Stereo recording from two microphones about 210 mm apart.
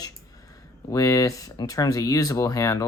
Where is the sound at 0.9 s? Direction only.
15° left (ahead or behind).